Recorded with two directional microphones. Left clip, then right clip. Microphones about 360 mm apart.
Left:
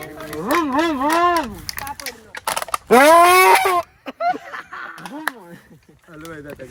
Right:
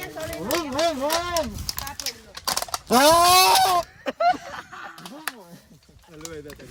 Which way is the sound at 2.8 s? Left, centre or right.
Centre.